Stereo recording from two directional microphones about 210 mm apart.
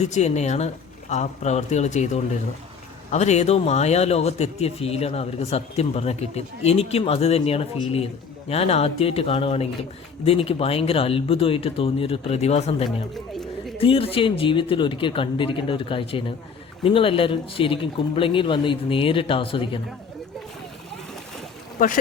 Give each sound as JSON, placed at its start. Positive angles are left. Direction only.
{"t": 0.0, "sound": "a man's voice", "side_deg": 30}
{"t": 13.1, "sound": "a sound", "side_deg": 0}
{"t": 13.7, "sound": "a man's voice", "side_deg": 25}